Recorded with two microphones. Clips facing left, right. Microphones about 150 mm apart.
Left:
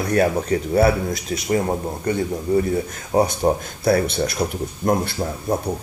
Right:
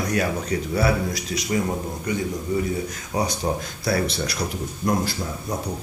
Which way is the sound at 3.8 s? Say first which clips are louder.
Left 6 dB; 50° left (ahead or behind).